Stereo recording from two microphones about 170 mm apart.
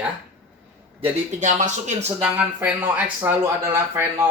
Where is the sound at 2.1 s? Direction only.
10° right (ahead or behind).